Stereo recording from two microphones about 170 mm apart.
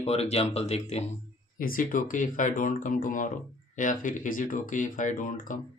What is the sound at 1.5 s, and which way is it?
Speech, 55° left (ahead or behind).